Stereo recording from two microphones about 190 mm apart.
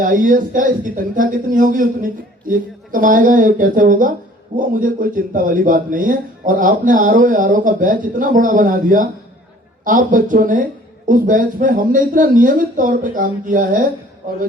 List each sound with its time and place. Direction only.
0.0 s a man's voice: 45° right (ahead or behind)